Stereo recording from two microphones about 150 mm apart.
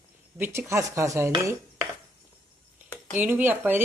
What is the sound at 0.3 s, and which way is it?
Speech, 15° right (ahead or behind).